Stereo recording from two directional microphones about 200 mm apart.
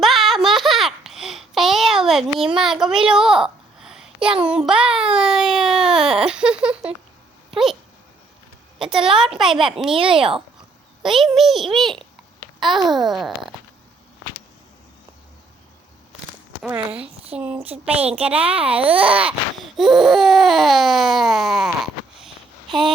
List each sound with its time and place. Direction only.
0.0 s a sound: centre (ahead or behind)
2.6 s a woman's voice: centre (ahead or behind)
9.4 s a woman's voice: centre (ahead or behind)
9.9 s speech: 25° right (ahead or behind)
11.0 s a child's voice: centre (ahead or behind)
12.5 s babbling: centre (ahead or behind)
12.9 s a woman's voice: centre (ahead or behind)
17.3 s a child's voice: 5° right (ahead or behind)